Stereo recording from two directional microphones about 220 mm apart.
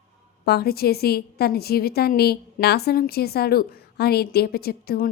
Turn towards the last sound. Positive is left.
turn(degrees=40)  # may be behind; listen again after turning